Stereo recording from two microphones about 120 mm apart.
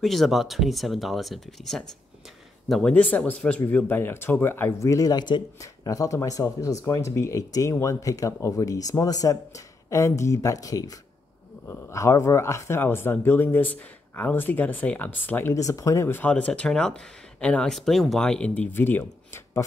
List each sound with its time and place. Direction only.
0.0 s speech: centre (ahead or behind); by 19.6 s 20° left (ahead or behind)